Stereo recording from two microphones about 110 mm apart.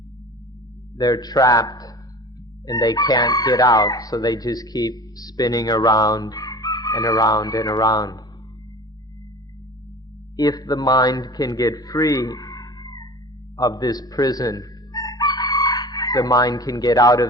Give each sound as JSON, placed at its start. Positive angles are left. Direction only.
{"t": 0.9, "sound": "chicken", "side_deg": 35}
{"t": 10.3, "sound": "speech", "side_deg": 35}